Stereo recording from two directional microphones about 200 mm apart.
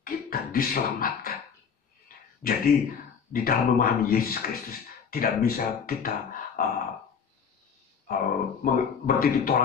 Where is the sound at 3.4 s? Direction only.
45° left (ahead or behind).